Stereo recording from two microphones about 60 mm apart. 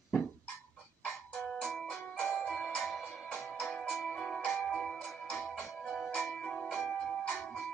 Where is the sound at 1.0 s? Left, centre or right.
Centre.